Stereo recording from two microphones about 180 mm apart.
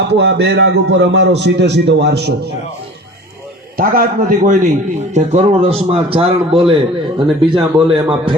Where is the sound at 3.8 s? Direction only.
50° right (ahead or behind).